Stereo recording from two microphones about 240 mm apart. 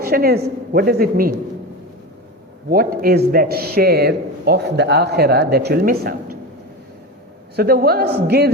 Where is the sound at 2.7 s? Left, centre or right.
Right.